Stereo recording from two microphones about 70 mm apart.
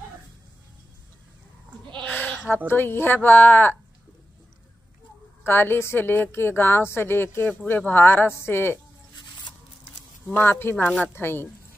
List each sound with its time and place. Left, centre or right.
2.0 s bleat: left
2.7 s speech: left
5.4 s a woman's voice: left
10.3 s a woman's voice: left